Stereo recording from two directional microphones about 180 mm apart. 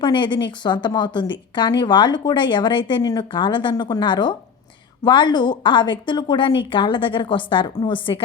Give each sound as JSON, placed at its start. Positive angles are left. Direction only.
{"t": 0.0, "sound": "a woman's voice", "side_deg": 25}